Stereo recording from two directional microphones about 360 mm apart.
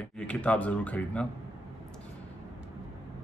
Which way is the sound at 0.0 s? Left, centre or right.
Centre.